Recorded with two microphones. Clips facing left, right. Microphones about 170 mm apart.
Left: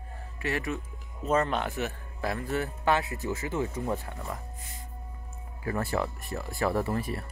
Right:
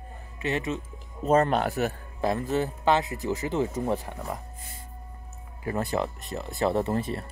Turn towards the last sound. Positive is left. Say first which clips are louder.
# right 3 dB
turn(degrees=-25)  # may be behind; listen again after turning